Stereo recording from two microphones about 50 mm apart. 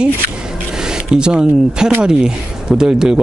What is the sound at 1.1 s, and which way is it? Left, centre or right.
Speech, centre.